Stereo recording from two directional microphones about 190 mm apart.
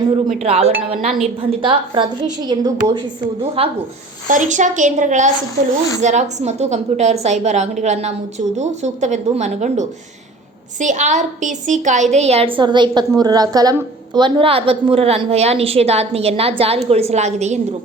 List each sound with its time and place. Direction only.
0.3 s a woman's voice: 35° right (ahead or behind)